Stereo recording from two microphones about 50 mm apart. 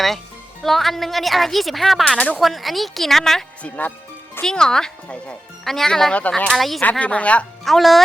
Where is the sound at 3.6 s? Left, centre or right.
Left.